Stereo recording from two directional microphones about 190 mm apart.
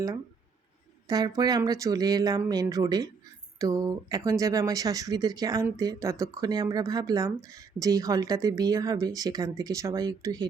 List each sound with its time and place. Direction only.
1.0 s speech: 20° right (ahead or behind)